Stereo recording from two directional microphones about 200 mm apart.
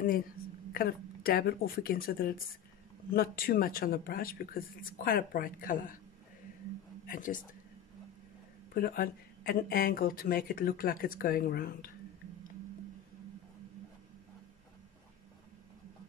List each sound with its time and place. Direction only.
0.7 s speech: 50° left (ahead or behind)
7.1 s speech: 40° left (ahead or behind)
8.7 s speech: 50° left (ahead or behind)